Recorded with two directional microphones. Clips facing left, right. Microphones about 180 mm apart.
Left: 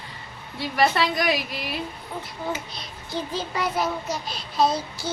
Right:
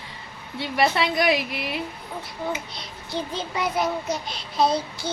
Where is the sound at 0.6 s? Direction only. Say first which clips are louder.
Even; 25° right (ahead or behind).